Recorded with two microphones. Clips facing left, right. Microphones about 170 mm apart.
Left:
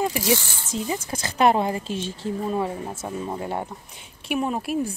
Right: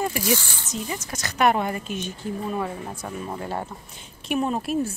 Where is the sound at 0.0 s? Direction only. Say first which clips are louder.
Left 2 dB; 20° left (ahead or behind).